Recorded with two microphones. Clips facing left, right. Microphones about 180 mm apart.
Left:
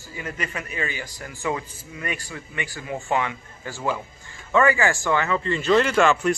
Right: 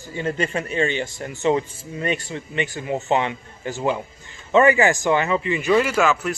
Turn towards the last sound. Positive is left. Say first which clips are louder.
# left 1 dB
turn(degrees=-5)  # may be behind; listen again after turning